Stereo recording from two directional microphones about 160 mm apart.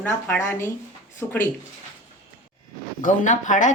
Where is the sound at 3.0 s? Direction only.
50° left (ahead or behind).